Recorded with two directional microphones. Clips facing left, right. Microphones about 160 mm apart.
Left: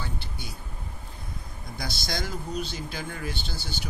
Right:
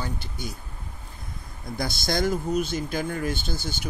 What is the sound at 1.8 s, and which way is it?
Speech, 50° right (ahead or behind).